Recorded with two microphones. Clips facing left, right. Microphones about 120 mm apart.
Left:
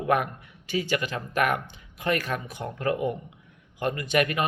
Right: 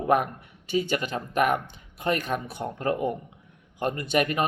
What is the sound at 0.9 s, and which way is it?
Speech, 40° right (ahead or behind).